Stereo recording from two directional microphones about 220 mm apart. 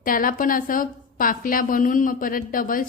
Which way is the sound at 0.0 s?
40° left (ahead or behind).